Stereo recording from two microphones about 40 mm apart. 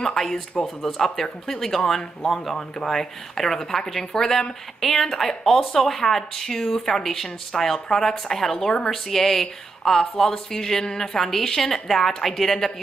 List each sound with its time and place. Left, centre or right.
0.0 s a woman's voice: centre